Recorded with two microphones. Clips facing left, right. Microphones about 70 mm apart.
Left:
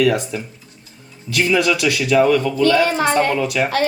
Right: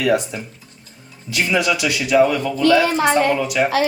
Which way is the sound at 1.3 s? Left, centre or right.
Centre.